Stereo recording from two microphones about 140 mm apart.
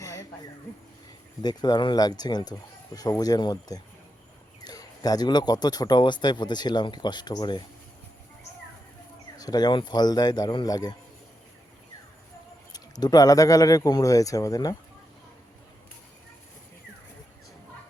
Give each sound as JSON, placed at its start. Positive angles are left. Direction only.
{"t": 0.0, "sound": "a sound", "side_deg": 25}
{"t": 1.4, "sound": "speech", "side_deg": 30}
{"t": 9.4, "sound": "speech", "side_deg": 30}
{"t": 12.7, "sound": "speech", "side_deg": 30}